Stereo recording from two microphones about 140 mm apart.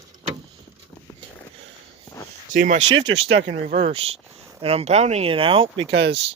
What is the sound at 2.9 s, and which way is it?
Speech, 40° right (ahead or behind).